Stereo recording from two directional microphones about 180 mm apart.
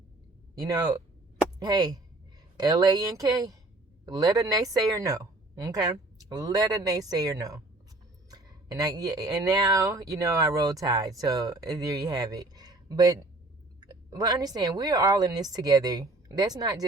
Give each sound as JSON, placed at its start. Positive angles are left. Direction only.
{"t": 0.6, "sound": "speech", "side_deg": -20}